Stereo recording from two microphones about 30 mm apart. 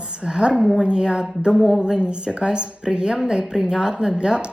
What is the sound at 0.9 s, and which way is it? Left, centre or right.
A woman's voice, right.